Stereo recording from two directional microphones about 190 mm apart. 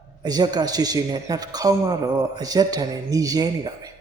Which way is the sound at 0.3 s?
20° right (ahead or behind).